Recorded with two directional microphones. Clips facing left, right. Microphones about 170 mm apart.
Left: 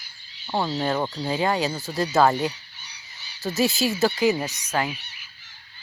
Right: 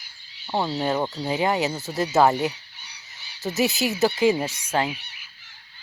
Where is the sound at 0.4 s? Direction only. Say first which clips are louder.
Even; 10° right (ahead or behind).